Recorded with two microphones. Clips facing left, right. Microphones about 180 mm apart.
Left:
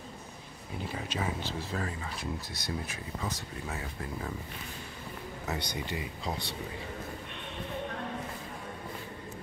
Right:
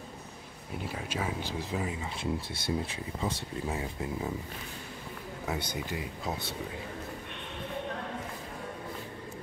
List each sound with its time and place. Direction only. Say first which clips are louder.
0.9 s speech: even; 5° right (ahead or behind)
2.1 s speech: right 4 dB; 25° right (ahead or behind)
5.5 s speech: right 1 dB; 5° right (ahead or behind)